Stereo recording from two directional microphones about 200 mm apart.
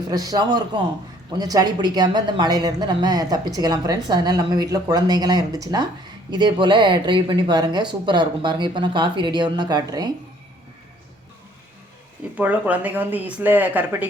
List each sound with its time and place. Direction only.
0.1 s speech: 20° right (ahead or behind)
12.4 s speech: 10° right (ahead or behind)